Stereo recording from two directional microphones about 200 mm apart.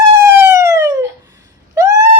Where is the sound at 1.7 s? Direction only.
15° right (ahead or behind).